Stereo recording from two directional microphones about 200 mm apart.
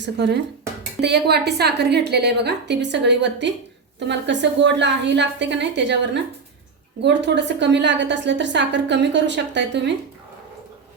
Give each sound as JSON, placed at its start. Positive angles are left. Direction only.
{"t": 0.0, "sound": "a woman's voice", "side_deg": -60}